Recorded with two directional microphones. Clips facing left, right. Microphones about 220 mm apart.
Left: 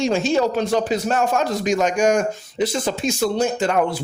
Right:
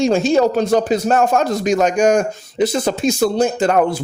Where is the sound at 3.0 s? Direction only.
35° right (ahead or behind).